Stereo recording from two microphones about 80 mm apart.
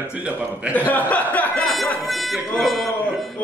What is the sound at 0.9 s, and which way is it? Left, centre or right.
Speech, centre.